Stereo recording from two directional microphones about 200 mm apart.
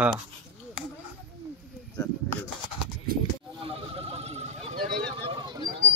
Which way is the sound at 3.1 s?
45° right (ahead or behind).